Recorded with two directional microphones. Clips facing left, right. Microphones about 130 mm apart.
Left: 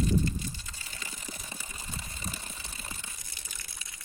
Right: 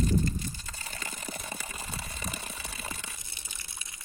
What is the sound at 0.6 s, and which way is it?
Water, 55° right (ahead or behind).